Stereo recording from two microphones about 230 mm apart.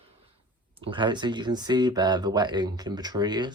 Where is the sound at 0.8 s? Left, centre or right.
Right.